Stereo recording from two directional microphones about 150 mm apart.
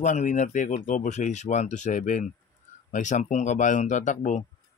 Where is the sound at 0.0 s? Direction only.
55° left (ahead or behind).